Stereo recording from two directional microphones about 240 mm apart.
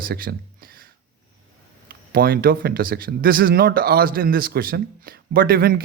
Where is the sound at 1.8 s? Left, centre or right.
Right.